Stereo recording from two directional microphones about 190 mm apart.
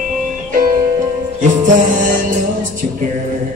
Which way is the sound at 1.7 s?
45° right (ahead or behind).